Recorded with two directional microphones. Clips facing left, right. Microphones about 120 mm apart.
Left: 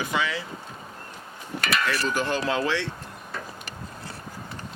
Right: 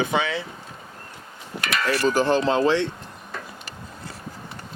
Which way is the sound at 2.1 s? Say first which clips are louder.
Right 10 dB; 35° right (ahead or behind).